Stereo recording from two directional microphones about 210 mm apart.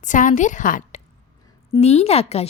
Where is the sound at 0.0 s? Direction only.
35° left (ahead or behind).